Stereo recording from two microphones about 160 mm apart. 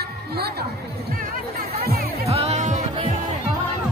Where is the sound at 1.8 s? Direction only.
75° right (ahead or behind).